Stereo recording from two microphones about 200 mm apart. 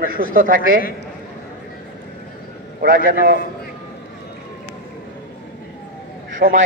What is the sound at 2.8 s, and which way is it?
Speech, 45° right (ahead or behind).